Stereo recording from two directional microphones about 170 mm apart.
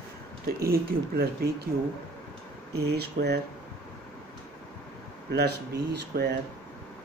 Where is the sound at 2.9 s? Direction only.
75° right (ahead or behind).